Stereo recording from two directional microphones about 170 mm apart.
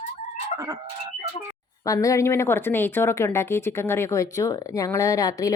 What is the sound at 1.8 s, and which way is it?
A woman's voice, 20° left (ahead or behind).